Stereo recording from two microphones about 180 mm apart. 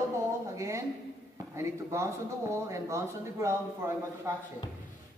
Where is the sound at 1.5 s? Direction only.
15° right (ahead or behind).